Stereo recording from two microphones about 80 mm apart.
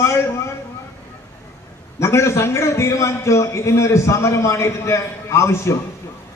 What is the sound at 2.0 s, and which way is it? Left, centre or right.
A man's voice, left.